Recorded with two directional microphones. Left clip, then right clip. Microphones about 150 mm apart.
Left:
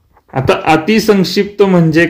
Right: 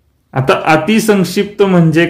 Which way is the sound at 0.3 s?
25° left (ahead or behind).